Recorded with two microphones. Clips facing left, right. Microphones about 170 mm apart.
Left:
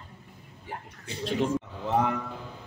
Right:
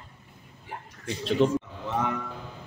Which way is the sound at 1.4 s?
75° right (ahead or behind).